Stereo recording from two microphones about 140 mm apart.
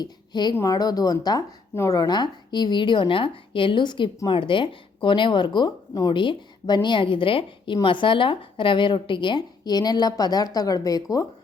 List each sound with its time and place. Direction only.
0.0 s a woman's voice: 30° left (ahead or behind)